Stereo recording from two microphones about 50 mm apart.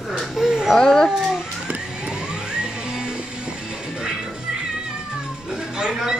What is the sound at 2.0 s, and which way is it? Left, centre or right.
Music, centre.